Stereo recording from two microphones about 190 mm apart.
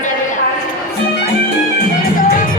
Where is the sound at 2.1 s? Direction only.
45° left (ahead or behind).